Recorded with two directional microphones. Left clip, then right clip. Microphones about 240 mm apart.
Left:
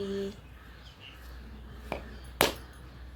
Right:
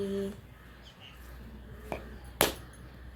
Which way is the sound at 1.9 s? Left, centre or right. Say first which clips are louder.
Left 1 dB; left.